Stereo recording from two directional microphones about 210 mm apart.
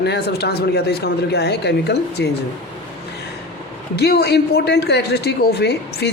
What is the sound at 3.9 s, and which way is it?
A man's voice, 50° left (ahead or behind).